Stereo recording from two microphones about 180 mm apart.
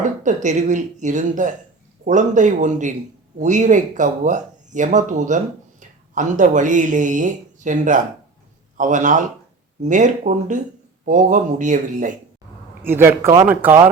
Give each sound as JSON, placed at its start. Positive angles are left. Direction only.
{"t": 0.0, "sound": "speech", "side_deg": -45}
{"t": 12.8, "sound": "a man's voice", "side_deg": -10}